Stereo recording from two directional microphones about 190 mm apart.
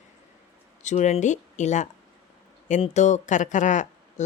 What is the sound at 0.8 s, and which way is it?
Speech, 40° left (ahead or behind).